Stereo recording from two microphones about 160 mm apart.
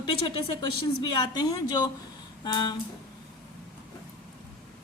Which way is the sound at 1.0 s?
25° left (ahead or behind).